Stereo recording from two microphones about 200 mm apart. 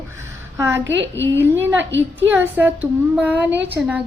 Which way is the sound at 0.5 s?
10° right (ahead or behind).